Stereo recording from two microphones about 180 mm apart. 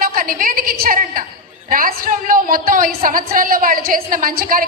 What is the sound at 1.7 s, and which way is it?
A woman's voice, 50° right (ahead or behind).